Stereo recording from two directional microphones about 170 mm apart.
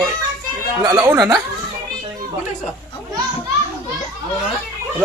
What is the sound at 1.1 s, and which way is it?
Speech, centre (ahead or behind).